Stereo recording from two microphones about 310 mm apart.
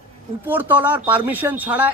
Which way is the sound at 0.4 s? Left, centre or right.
Centre.